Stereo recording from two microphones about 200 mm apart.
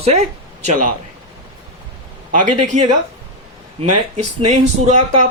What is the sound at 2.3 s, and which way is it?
Speech, 40° right (ahead or behind).